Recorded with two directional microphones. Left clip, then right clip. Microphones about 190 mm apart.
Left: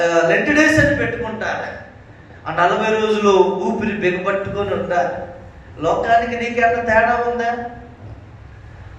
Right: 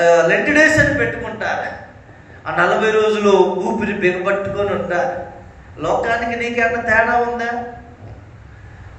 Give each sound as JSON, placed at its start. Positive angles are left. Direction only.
{"t": 0.0, "sound": "a man's voice", "side_deg": -20}